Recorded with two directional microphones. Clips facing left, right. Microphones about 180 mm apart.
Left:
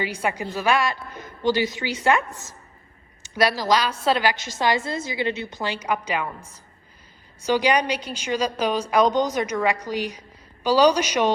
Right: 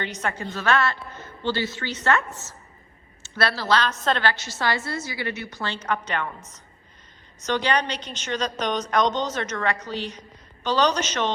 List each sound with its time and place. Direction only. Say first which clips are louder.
0.0 s a woman's voice: left 3 dB; 10° left (ahead or behind)
7.4 s a woman's voice: left 4 dB; 10° left (ahead or behind)